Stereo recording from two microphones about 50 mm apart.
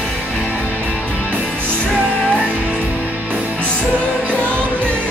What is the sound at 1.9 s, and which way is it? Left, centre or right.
Music, left.